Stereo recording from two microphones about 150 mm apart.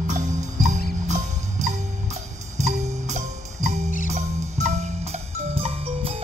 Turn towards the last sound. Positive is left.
turn(degrees=-40)  # may be behind; listen again after turning